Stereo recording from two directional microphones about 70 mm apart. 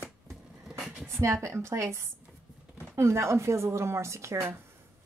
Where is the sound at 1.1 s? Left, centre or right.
Right.